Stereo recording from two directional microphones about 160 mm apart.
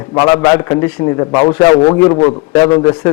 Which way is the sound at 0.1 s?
25° left (ahead or behind).